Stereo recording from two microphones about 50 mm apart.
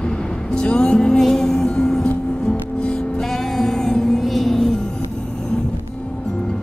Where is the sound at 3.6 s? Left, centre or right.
Centre.